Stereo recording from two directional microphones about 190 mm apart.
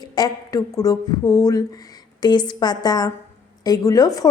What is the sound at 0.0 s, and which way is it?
Speech, 20° left (ahead or behind).